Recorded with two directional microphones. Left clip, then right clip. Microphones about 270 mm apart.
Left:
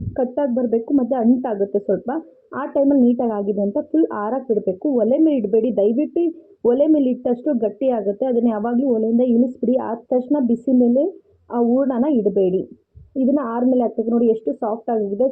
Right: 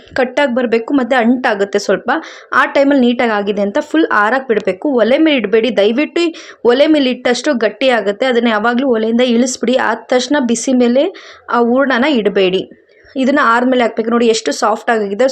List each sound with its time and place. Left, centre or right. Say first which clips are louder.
0.1 s a woman's voice: right 7 dB; right